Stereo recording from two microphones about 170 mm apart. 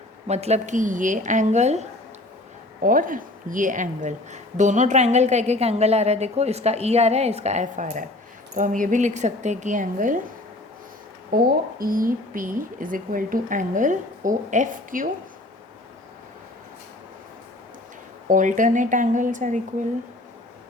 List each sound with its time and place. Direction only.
0.3 s speech: 40° right (ahead or behind)
2.8 s a woman's voice: 55° right (ahead or behind)
11.3 s speech: 55° right (ahead or behind)
18.3 s speech: 50° right (ahead or behind)